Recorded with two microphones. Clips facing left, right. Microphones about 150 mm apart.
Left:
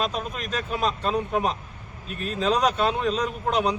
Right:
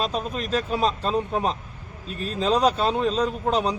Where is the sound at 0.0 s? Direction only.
35° right (ahead or behind).